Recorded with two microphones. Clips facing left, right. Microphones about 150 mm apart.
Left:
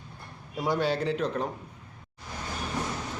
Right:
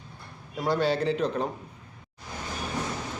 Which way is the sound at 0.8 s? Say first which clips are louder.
Right 3 dB; centre (ahead or behind).